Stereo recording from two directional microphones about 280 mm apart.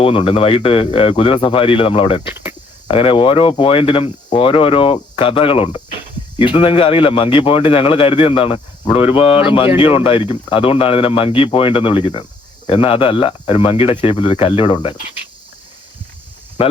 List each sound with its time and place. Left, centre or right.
0.0 s speech: centre
2.2 s cricket: centre
2.8 s speech: centre